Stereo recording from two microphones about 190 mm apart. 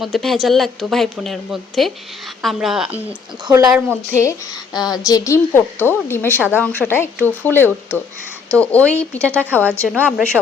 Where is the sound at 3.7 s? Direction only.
10° right (ahead or behind).